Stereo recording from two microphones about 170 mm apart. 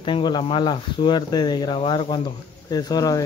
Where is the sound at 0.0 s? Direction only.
25° left (ahead or behind).